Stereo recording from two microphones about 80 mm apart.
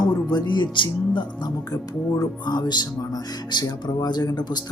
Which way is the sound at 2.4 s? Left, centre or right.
Left.